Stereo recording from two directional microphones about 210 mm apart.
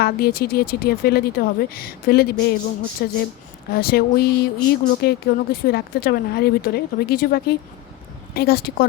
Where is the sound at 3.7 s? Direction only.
45° left (ahead or behind).